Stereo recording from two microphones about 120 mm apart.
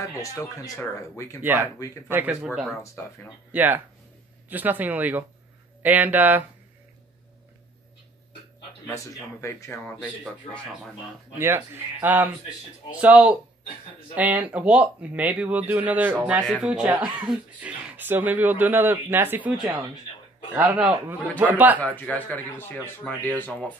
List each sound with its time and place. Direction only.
0.2 s speech: 25° left (ahead or behind)
1.4 s speech: 15° right (ahead or behind)
2.4 s speech: 5° right (ahead or behind)
3.5 s speech: 15° right (ahead or behind)
8.8 s speech: 25° left (ahead or behind)
11.3 s speech: 20° right (ahead or behind)
19.5 s speech: 5° right (ahead or behind)
21.7 s speech: 10° left (ahead or behind)